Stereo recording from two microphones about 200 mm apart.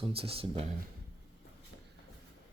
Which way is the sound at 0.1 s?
30° right (ahead or behind).